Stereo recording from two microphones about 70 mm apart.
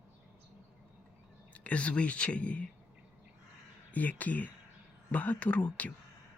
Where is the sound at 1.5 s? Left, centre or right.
Left.